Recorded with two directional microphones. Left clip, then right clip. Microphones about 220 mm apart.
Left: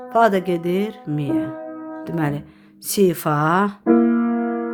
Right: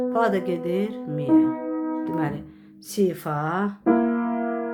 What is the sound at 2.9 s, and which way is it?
Speech, 50° left (ahead or behind).